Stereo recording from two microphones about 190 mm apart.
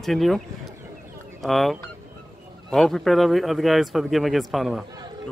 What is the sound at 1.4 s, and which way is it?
A man's voice, centre (ahead or behind).